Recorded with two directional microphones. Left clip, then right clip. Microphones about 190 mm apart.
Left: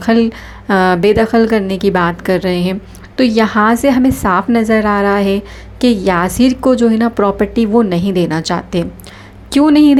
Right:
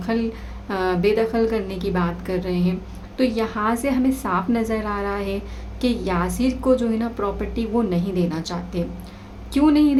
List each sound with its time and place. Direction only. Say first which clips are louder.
0.0 s a woman's voice: left 12 dB; 40° left (ahead or behind)